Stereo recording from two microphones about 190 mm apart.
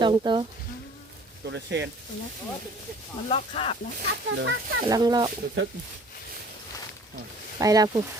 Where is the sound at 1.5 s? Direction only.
70° right (ahead or behind).